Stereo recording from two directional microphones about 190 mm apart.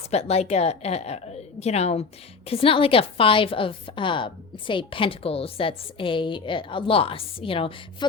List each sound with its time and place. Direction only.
0.1 s a woman's voice: 35° left (ahead or behind)